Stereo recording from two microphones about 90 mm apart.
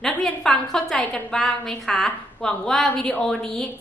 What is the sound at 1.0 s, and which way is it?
Speech, 15° left (ahead or behind).